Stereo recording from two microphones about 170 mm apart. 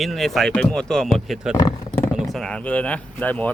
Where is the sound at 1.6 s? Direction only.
20° left (ahead or behind).